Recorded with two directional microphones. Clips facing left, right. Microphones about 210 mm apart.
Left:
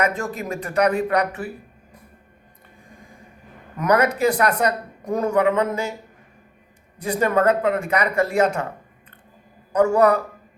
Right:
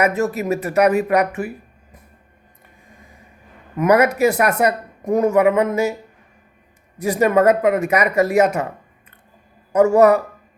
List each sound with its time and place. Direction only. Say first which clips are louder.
0.0 s speech: right 5 dB; 5° right (ahead or behind)
3.8 s speech: right 4 dB; 10° right (ahead or behind)
5.0 s speech: right 6 dB; 20° right (ahead or behind)
5.5 s speech: right 5 dB; 10° right (ahead or behind)
7.0 s speech: right 4 dB; 10° right (ahead or behind)
9.9 s speech: right 5 dB; 10° right (ahead or behind)